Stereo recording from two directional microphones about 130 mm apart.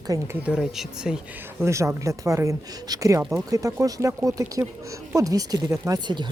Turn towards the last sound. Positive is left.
turn(degrees=-35)  # may be behind; listen again after turning